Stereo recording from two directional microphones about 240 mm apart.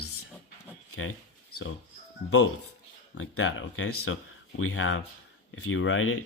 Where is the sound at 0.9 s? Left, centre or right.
Left.